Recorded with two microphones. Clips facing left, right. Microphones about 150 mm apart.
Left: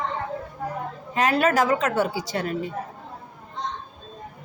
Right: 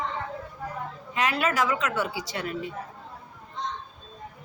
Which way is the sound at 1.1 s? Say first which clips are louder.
Left 5 dB; 40° left (ahead or behind).